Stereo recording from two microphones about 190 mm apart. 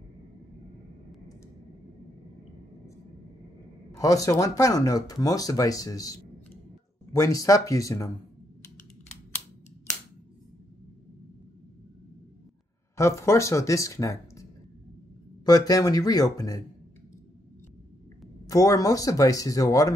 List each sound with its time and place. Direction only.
4.0 s speech: 15° left (ahead or behind)
12.9 s speech: 15° left (ahead or behind)
15.4 s speech: 20° left (ahead or behind)
18.5 s speech: 20° left (ahead or behind)